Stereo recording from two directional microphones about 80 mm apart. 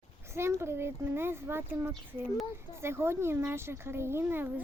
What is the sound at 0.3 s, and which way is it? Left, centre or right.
Speech, right.